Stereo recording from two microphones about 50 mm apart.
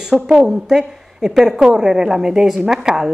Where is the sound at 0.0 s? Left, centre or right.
Centre.